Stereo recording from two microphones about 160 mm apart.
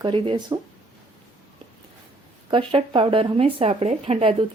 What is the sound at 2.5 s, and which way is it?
A woman's voice, 30° right (ahead or behind).